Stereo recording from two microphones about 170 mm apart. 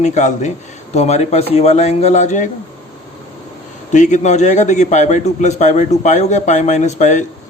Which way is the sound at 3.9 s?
45° left (ahead or behind).